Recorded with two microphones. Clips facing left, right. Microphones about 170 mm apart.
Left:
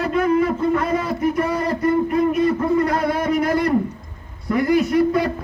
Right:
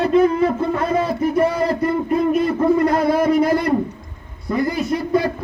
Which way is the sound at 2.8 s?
25° right (ahead or behind).